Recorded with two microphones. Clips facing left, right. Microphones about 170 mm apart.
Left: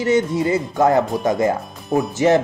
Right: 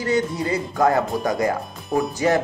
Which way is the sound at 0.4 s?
25° left (ahead or behind).